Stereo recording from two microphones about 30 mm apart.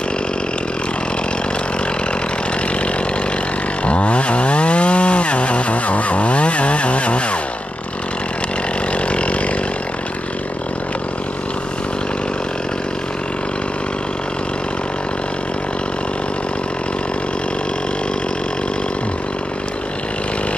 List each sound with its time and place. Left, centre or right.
3.8 s chainsaw: left
8.9 s chainsaw: left